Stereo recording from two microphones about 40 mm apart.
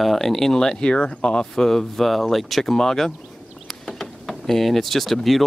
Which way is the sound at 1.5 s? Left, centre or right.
Centre.